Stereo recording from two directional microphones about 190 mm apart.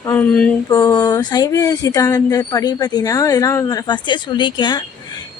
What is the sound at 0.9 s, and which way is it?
Speech, 20° left (ahead or behind).